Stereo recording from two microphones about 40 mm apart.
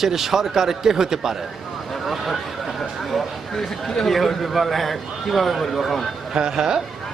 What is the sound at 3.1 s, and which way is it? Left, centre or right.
A man's voice, centre.